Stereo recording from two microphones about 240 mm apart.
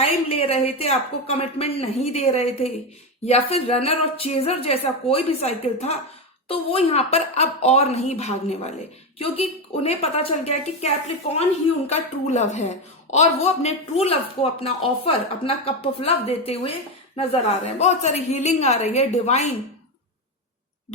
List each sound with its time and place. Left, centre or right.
0.0 s a woman's voice: left
11.9 s a woman's voice: left